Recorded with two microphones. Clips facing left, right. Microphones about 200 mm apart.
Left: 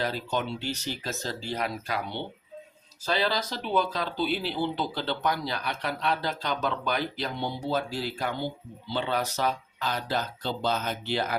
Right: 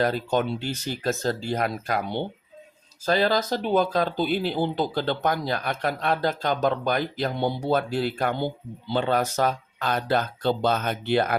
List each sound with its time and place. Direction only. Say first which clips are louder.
0.0 s speech: right 6 dB; 50° right (ahead or behind)